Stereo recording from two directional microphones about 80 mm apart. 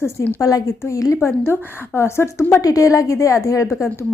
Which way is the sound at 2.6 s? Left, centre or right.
Left.